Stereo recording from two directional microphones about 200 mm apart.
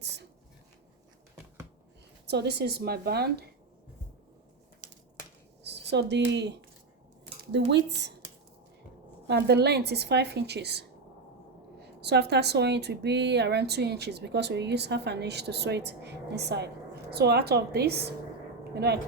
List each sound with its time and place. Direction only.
2.2 s a woman's voice: 55° right (ahead or behind)
5.6 s speech: 55° right (ahead or behind)
7.7 s speech: 60° right (ahead or behind)
9.2 s a man's voice: 55° right (ahead or behind)